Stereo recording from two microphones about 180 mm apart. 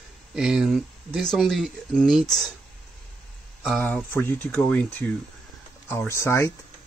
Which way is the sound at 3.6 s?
5° left (ahead or behind).